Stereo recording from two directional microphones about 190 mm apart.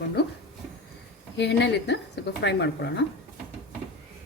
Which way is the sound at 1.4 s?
65° left (ahead or behind).